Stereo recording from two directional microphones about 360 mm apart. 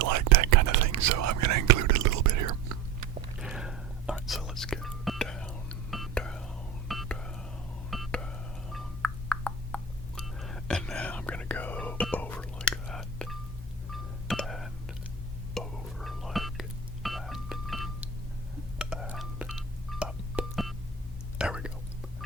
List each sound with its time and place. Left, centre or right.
0.0 s whispering: right
3.4 s whispering: centre
7.9 s a sound: centre
13.9 s music: centre
21.3 s whispering: centre